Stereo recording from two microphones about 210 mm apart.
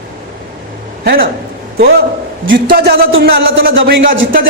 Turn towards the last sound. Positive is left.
turn(degrees=-45)  # may be behind; listen again after turning